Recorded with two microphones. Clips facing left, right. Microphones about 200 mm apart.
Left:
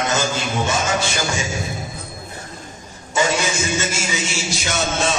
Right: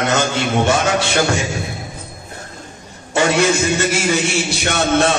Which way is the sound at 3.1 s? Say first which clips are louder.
Right 5 dB; 60° right (ahead or behind).